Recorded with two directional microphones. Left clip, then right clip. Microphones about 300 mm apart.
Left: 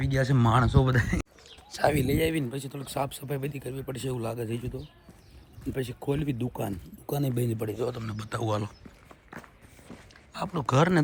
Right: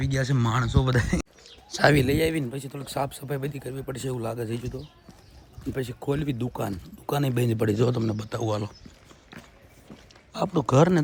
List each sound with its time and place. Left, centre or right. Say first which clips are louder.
0.0 s speech: left 1 dB; centre
7.6 s speech: right 11 dB; right
8.0 s speech: right 4 dB; centre
10.3 s speech: right 4 dB; centre